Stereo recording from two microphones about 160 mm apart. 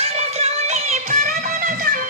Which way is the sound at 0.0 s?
40° right (ahead or behind).